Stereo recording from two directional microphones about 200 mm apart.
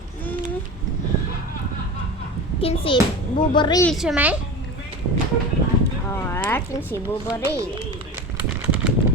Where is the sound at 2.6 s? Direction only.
30° left (ahead or behind).